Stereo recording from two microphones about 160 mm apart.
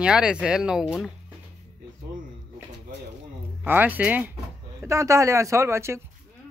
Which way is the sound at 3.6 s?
10° right (ahead or behind).